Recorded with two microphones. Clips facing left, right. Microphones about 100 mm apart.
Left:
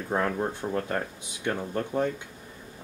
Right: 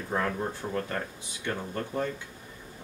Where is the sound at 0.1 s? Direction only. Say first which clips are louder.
Left 3 dB; 25° left (ahead or behind).